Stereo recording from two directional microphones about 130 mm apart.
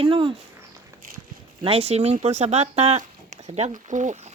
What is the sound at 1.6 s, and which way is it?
Speech, 50° right (ahead or behind).